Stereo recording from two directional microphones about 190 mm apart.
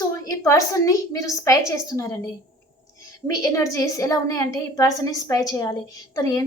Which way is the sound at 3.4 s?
15° left (ahead or behind).